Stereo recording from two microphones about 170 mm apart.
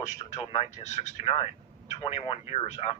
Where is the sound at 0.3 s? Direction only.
35° left (ahead or behind).